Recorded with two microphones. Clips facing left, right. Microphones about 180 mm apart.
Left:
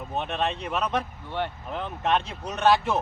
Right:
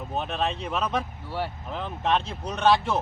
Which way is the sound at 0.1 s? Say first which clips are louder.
Even; centre (ahead or behind).